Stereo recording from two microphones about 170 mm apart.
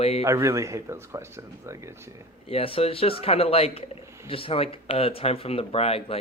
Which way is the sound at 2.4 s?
35° left (ahead or behind).